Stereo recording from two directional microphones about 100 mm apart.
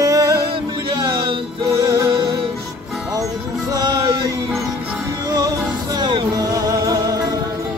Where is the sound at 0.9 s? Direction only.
45° right (ahead or behind).